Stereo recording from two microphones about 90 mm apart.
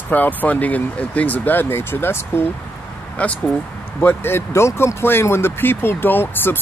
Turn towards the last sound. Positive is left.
turn(degrees=25)  # may be behind; listen again after turning